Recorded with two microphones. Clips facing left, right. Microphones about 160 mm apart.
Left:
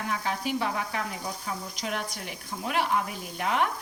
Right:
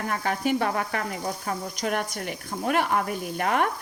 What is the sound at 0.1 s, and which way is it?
Speech, 55° right (ahead or behind).